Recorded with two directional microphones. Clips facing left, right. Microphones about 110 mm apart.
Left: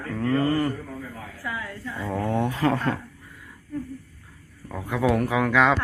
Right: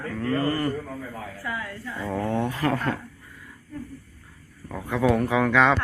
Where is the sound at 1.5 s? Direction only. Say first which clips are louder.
Left 1 dB; 5° right (ahead or behind).